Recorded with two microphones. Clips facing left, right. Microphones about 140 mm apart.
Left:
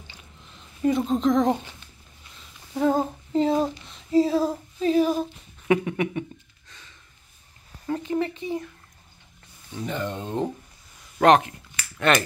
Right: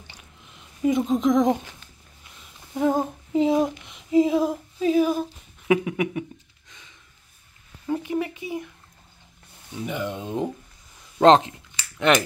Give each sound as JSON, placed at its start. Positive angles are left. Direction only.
{"t": 1.0, "sound": "speech", "side_deg": -10}
{"t": 2.7, "sound": "female singing", "side_deg": -10}
{"t": 7.8, "sound": "speech", "side_deg": -10}
{"t": 9.8, "sound": "speech", "side_deg": -10}
{"t": 11.1, "sound": "speech", "side_deg": -25}